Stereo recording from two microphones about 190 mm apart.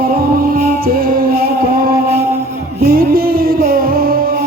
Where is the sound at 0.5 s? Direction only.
45° right (ahead or behind).